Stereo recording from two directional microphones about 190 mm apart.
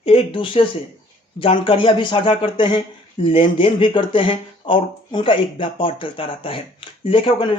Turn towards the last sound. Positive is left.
turn(degrees=25)  # may be behind; listen again after turning